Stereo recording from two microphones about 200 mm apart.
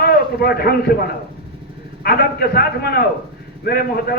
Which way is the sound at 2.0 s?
50° left (ahead or behind).